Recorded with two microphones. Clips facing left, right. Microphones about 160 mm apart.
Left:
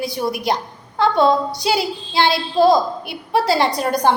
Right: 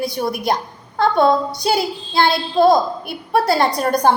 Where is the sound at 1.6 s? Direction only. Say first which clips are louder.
Right 2 dB; 50° right (ahead or behind).